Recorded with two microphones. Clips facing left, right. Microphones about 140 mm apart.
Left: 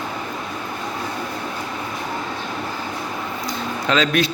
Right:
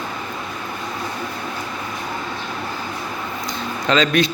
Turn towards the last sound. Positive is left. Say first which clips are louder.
# right 2 dB
turn(degrees=5)  # may be behind; listen again after turning